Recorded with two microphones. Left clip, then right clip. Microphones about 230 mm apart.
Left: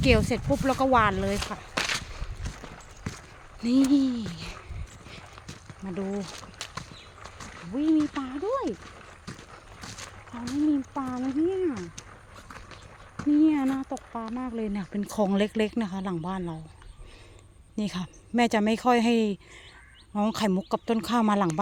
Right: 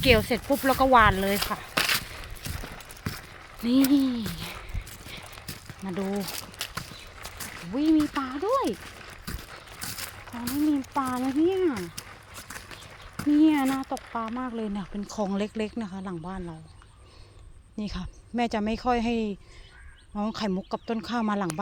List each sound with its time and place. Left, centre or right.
0.0 s speech: centre
1.4 s a sound: right
3.6 s speech: centre
5.8 s speech: centre
6.1 s horse: right
7.9 s speech: right
8.2 s speech: centre
8.8 s a sound: right
10.7 s speech: centre
11.7 s a sound: right
13.3 s speech: centre
15.0 s speech: left
17.7 s speech: left